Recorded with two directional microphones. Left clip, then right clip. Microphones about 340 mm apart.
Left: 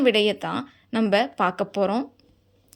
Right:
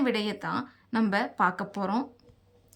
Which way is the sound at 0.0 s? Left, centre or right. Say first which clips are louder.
Left 9 dB; centre.